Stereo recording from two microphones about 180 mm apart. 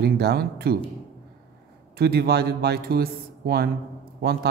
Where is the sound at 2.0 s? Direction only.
60° right (ahead or behind).